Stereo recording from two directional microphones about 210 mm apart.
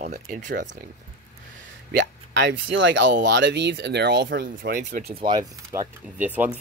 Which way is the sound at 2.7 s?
60° right (ahead or behind).